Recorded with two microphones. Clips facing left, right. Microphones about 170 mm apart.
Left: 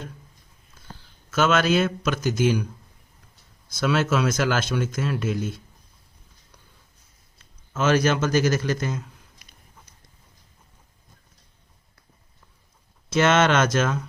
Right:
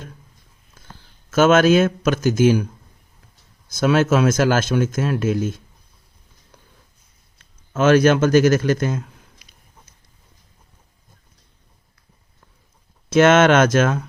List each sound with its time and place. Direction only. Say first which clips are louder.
1.3 s speech: right 7 dB; 50° right (ahead or behind)
3.7 s speech: right 6 dB; 45° right (ahead or behind)
7.7 s speech: right 7 dB; 55° right (ahead or behind)
13.1 s speech: right 6 dB; 50° right (ahead or behind)